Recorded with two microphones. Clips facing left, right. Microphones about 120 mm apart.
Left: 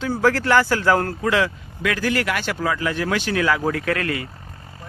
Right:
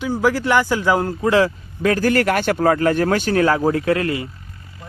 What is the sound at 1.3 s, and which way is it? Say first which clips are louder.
Speech: right 6 dB; 35° right (ahead or behind).